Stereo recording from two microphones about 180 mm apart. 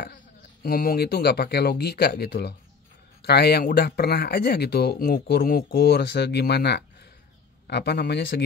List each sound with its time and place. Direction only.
0.0 s speech: 55° left (ahead or behind)